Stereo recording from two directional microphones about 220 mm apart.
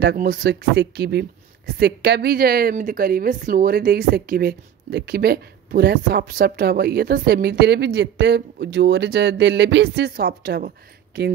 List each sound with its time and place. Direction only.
0.0 s a woman's voice: 45° right (ahead or behind)